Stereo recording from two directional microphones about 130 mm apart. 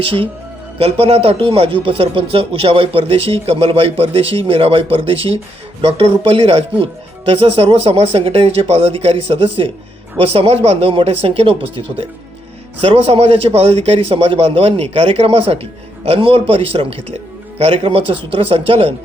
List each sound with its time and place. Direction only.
0.8 s speech: 50° right (ahead or behind)
12.8 s speech: 50° right (ahead or behind)